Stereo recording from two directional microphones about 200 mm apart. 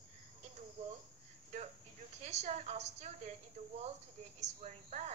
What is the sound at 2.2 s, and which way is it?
A woman's voice, 35° right (ahead or behind).